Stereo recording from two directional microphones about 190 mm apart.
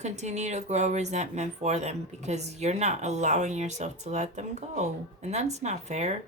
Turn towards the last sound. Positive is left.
turn(degrees=-35)  # may be behind; listen again after turning